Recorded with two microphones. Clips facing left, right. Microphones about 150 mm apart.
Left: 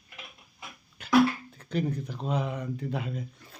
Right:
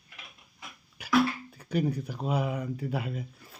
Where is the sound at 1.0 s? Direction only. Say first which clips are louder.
Left 2 dB; 10° right (ahead or behind).